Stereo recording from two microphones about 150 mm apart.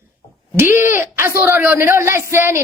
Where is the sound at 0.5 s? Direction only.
15° right (ahead or behind).